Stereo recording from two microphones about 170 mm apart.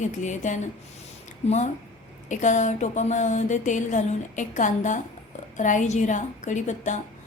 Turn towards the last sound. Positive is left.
turn(degrees=45)  # may be behind; listen again after turning